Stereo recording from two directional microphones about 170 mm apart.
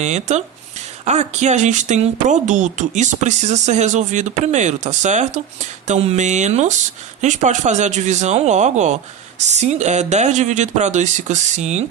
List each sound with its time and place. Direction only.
0.0 s speech: 45° right (ahead or behind)